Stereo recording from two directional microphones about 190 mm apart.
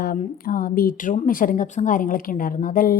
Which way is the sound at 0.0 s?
50° left (ahead or behind).